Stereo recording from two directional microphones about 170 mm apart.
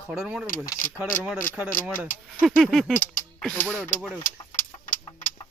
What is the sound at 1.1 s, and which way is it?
Speech, 50° left (ahead or behind).